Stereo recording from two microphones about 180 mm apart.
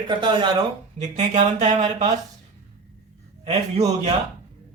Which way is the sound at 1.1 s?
40° right (ahead or behind).